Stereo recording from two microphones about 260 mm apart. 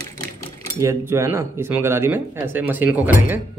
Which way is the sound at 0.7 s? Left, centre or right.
Centre.